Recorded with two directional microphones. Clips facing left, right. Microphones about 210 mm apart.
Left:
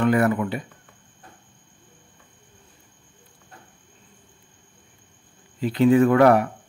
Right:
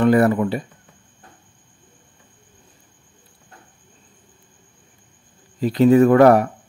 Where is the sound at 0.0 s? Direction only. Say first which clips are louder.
Right 4 dB; 35° right (ahead or behind).